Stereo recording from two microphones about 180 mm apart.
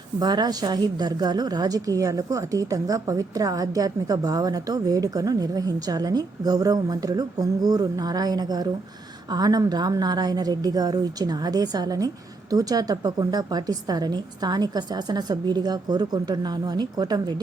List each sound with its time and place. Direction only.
0.2 s a woman's voice: 25° right (ahead or behind)